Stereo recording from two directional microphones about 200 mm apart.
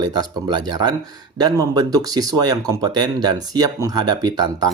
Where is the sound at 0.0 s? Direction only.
20° right (ahead or behind).